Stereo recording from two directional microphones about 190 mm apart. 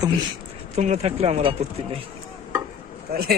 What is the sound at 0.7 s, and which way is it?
Speech, 35° right (ahead or behind).